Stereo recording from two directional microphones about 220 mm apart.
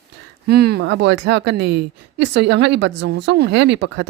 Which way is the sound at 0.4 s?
45° right (ahead or behind).